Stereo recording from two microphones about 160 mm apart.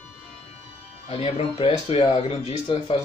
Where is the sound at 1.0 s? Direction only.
35° left (ahead or behind).